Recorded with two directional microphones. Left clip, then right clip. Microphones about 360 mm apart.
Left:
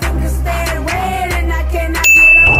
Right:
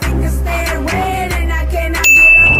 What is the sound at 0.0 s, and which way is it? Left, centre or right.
Music, centre.